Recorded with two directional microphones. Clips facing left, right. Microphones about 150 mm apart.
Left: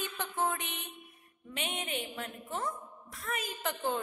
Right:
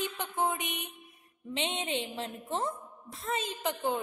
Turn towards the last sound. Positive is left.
turn(degrees=-15)  # may be behind; listen again after turning